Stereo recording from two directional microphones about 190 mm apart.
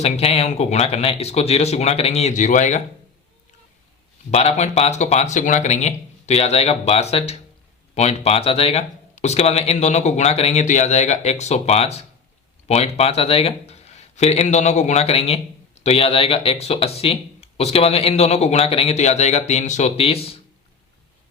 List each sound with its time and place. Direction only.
0.0 s speech: 30° left (ahead or behind)
4.3 s speech: 35° left (ahead or behind)